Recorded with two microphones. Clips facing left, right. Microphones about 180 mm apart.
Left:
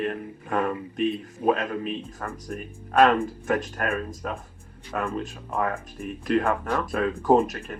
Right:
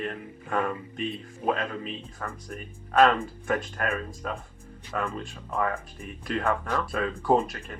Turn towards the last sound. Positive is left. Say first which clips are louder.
# left 4 dB
turn(degrees=45)  # may be behind; listen again after turning